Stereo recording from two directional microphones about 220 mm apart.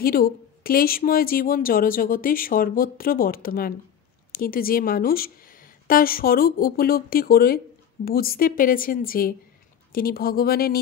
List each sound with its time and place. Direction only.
0.0 s a woman's voice: 40° left (ahead or behind)